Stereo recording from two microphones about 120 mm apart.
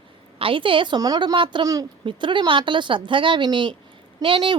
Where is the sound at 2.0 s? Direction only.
40° right (ahead or behind).